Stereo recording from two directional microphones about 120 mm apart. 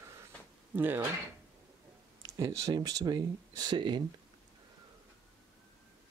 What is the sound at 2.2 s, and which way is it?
Speech, 25° right (ahead or behind).